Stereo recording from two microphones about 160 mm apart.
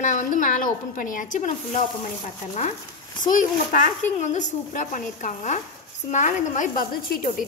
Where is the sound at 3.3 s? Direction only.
55° left (ahead or behind).